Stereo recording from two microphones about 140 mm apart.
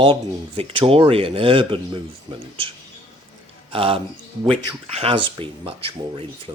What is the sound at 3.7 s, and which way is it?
Speech, 40° right (ahead or behind).